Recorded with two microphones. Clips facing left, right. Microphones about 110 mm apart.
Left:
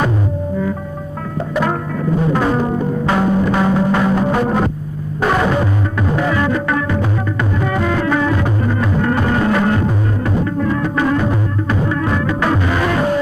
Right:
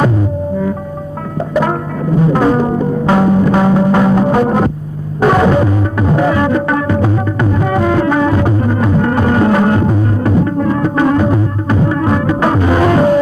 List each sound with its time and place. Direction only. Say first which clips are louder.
2.3 s music: right 4 dB; 40° right (ahead or behind)